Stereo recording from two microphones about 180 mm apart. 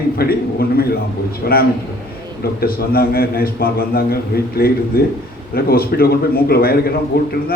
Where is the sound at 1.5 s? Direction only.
55° left (ahead or behind).